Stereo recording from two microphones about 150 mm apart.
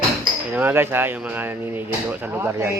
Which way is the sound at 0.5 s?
15° right (ahead or behind).